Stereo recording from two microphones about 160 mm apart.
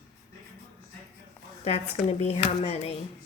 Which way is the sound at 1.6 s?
40° left (ahead or behind).